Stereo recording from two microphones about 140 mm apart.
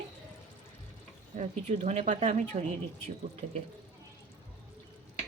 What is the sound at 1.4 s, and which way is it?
Speech, 55° right (ahead or behind).